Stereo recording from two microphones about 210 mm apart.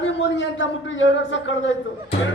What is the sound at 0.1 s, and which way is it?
A woman's voice, 60° left (ahead or behind).